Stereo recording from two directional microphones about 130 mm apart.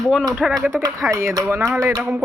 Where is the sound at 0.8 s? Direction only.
25° right (ahead or behind).